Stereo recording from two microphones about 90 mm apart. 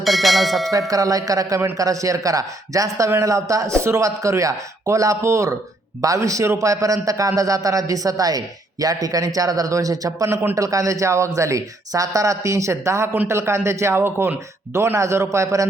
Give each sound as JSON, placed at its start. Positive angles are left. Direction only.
{"t": 0.0, "sound": "clang", "side_deg": 0}
{"t": 0.7, "sound": "a man's voice", "side_deg": -40}